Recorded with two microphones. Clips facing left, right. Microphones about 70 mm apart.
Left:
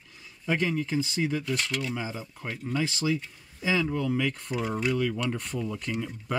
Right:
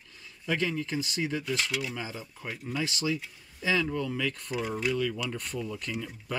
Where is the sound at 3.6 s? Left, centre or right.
Centre.